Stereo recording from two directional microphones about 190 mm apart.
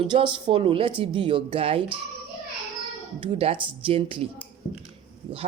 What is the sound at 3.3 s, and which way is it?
Speech, 30° right (ahead or behind).